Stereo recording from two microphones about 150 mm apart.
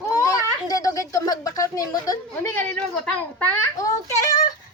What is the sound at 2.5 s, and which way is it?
Speech, 10° left (ahead or behind).